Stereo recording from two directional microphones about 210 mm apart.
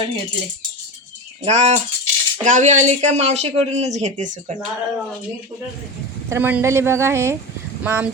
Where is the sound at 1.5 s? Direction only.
30° right (ahead or behind).